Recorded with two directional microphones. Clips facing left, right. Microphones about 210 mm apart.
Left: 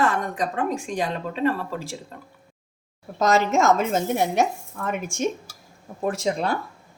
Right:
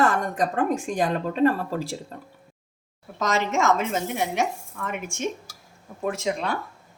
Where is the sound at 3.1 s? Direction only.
40° left (ahead or behind).